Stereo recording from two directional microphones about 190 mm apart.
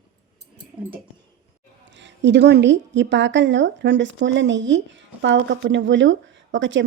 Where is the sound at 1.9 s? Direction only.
70° right (ahead or behind).